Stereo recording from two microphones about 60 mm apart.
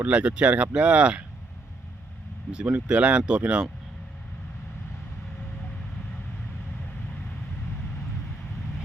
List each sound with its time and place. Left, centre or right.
0.0 s speech: centre
2.5 s speech: centre